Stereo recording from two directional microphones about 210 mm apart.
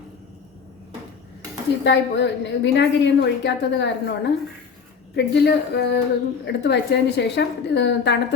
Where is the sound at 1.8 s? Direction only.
55° left (ahead or behind).